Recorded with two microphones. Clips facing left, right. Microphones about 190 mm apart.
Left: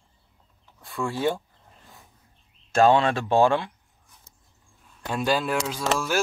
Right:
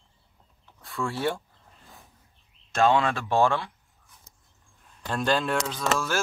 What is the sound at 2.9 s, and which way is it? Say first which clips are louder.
Speech: left 3 dB; 30° left (ahead or behind).